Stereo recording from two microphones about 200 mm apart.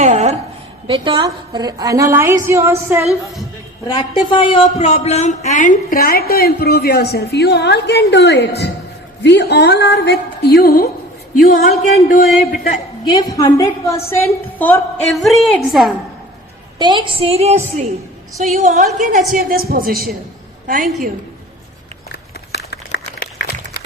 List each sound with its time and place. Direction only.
0.0 s a sound: 35° right (ahead or behind)
0.9 s a woman's voice: 25° right (ahead or behind)
4.3 s a woman's voice: 25° left (ahead or behind)
14.6 s a woman's voice: 5° left (ahead or behind)
16.7 s a woman's voice: 20° right (ahead or behind); by 20.9 s 45° right (ahead or behind)
22.1 s a sound: 55° left (ahead or behind)